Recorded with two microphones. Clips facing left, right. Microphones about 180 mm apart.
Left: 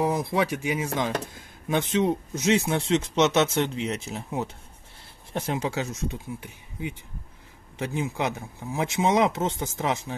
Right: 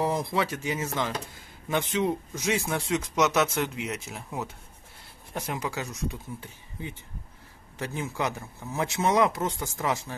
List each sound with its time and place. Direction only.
0.0 s a man's voice: 15° left (ahead or behind)
6.2 s speech: 15° left (ahead or behind)